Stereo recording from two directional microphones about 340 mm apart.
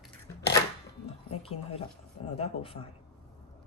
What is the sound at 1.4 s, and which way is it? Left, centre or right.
Speech, centre.